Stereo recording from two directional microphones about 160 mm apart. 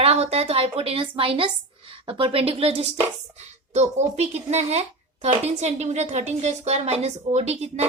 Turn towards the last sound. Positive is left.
turn(degrees=-40)  # may be behind; listen again after turning